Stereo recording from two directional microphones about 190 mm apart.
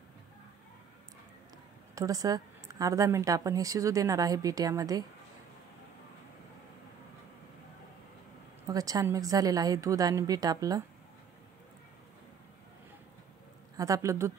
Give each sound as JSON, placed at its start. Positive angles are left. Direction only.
{"t": 2.0, "sound": "a woman's voice", "side_deg": -20}
{"t": 8.6, "sound": "a woman's voice", "side_deg": -20}
{"t": 13.7, "sound": "a woman's voice", "side_deg": -15}